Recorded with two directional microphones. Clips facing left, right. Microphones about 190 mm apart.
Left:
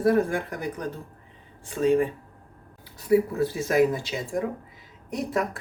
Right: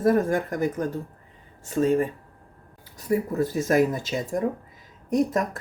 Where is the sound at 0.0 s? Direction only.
45° right (ahead or behind).